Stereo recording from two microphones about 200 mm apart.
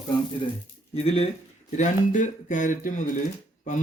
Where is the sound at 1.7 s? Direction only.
40° left (ahead or behind).